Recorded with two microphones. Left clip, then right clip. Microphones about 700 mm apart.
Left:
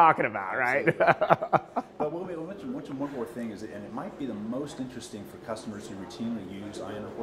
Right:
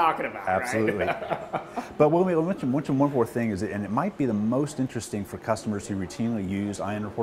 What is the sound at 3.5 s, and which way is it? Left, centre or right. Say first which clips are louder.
Speech: right 9 dB; right.